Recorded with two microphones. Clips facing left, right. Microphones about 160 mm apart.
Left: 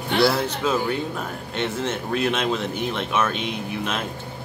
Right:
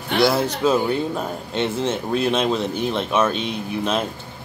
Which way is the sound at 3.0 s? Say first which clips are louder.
Right 4 dB; 20° right (ahead or behind).